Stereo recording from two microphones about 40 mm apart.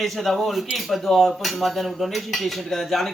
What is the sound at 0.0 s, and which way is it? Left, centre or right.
Speech, centre.